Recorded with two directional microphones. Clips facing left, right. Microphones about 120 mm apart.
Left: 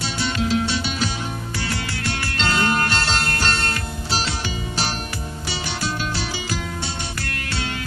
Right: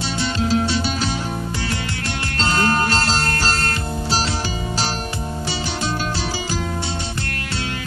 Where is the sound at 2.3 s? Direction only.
35° right (ahead or behind).